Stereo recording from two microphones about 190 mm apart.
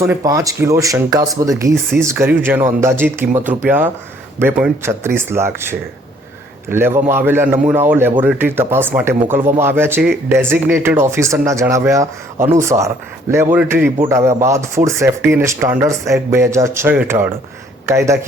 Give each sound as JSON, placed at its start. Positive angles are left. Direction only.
{"t": 0.0, "sound": "speech", "side_deg": -15}